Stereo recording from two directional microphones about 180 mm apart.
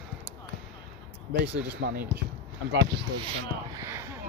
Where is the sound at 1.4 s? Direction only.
65° right (ahead or behind).